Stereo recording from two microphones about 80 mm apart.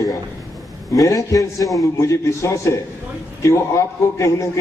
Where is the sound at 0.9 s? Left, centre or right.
Left.